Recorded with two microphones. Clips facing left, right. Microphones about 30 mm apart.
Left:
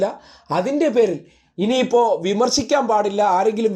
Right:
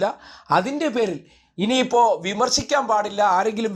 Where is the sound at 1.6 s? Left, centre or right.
Right.